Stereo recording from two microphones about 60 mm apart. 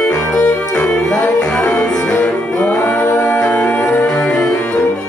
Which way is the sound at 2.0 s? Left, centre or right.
Left.